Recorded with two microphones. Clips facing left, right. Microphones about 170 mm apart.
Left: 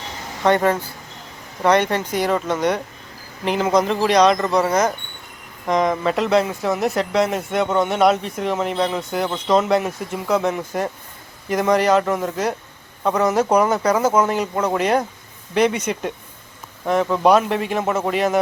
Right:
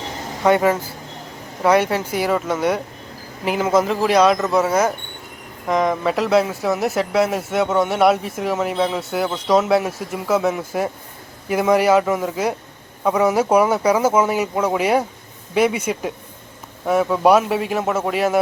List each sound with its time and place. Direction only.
0.4 s speech: 10° right (ahead or behind)